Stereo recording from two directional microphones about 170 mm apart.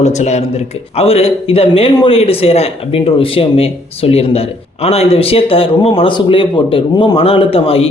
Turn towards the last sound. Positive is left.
turn(degrees=35)  # may be behind; listen again after turning